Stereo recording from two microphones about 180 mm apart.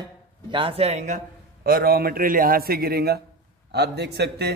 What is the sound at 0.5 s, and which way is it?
A man's voice, 30° right (ahead or behind).